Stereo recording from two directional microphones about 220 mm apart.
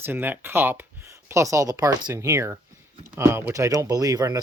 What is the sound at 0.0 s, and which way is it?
Speech, 10° right (ahead or behind).